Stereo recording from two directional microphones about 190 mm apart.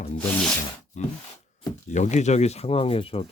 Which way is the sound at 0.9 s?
40° left (ahead or behind).